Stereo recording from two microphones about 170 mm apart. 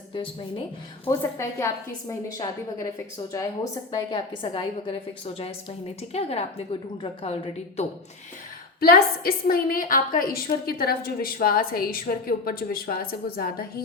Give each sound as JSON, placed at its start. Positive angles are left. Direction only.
{"t": 0.1, "sound": "a woman's voice", "side_deg": 30}
{"t": 1.0, "sound": "a woman's voice", "side_deg": 15}
{"t": 3.9, "sound": "a woman's voice", "side_deg": 25}
{"t": 8.8, "sound": "a woman's voice", "side_deg": 60}